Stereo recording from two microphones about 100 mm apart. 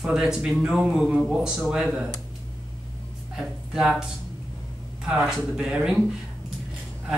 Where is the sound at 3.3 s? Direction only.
5° right (ahead or behind).